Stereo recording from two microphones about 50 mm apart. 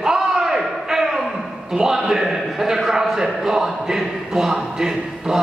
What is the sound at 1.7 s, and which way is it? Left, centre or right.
A man's voice, centre.